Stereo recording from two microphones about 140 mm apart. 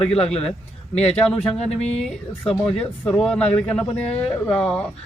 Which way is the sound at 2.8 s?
5° left (ahead or behind).